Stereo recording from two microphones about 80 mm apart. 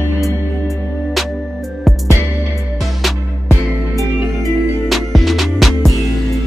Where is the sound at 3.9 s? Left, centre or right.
Right.